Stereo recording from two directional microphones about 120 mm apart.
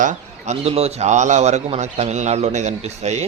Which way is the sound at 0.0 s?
80° right.